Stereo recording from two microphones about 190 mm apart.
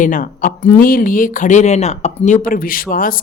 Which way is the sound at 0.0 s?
45° left (ahead or behind).